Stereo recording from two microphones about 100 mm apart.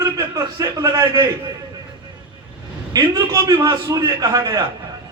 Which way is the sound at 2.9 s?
35° right (ahead or behind).